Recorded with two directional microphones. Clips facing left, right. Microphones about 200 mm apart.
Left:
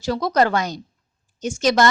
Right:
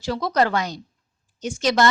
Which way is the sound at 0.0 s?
45° left (ahead or behind).